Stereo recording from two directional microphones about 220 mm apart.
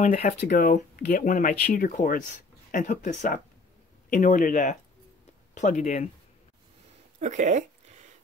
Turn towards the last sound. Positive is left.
turn(degrees=-35)  # may be behind; listen again after turning